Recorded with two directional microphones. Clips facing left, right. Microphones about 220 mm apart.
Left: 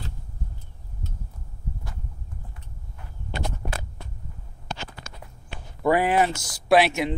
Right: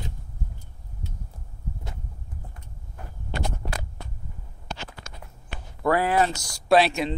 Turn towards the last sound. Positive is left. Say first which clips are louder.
# even
turn(degrees=15)  # may be behind; listen again after turning